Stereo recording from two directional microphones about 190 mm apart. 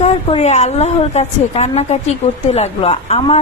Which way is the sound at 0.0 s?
35° left (ahead or behind).